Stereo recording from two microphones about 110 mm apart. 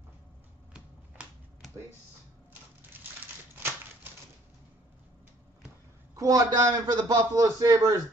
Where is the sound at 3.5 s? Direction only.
20° right (ahead or behind).